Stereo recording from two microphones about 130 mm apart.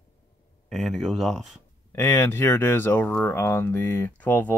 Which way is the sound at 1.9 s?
15° left (ahead or behind).